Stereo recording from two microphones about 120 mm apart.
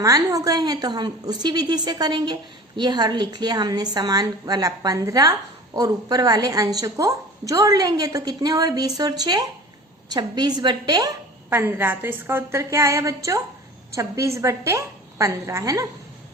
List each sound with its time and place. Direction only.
0.0 s a woman's voice: 30° right (ahead or behind)
11.4 s a woman's voice: 20° right (ahead or behind)